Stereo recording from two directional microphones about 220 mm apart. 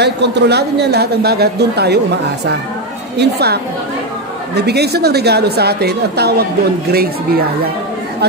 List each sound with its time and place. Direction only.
0.0 s a man's voice: 50° right (ahead or behind)
3.2 s a man's voice: 50° right (ahead or behind)
4.6 s a man's voice: 45° right (ahead or behind)